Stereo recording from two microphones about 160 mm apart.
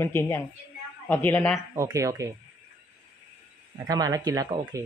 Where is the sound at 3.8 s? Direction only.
25° right (ahead or behind).